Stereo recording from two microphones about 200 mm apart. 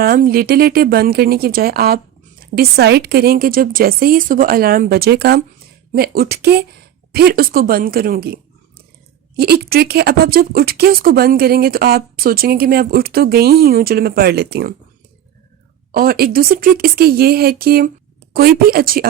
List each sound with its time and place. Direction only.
0.0 s speech: 50° right (ahead or behind)
15.9 s speech: 45° right (ahead or behind)